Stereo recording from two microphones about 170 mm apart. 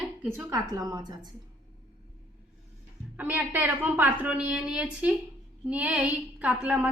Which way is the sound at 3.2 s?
10° right (ahead or behind).